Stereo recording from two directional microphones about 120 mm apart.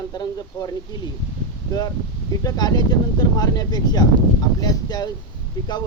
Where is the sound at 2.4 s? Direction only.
30° left (ahead or behind).